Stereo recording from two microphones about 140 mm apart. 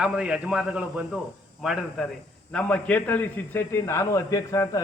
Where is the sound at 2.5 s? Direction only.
10° left (ahead or behind).